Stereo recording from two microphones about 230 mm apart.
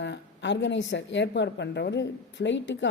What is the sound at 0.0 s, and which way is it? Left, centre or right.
A woman's voice, left.